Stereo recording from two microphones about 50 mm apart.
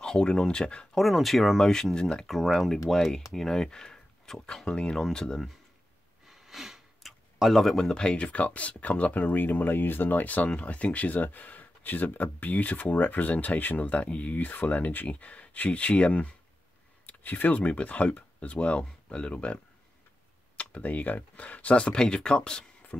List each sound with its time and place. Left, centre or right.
0.0 s speech: centre
0.9 s speech: centre
1.6 s speech: centre
2.2 s speech: centre
4.6 s speech: left
4.9 s speech: centre
6.2 s speech: centre